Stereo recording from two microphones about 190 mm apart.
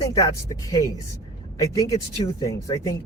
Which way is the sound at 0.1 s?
20° left (ahead or behind).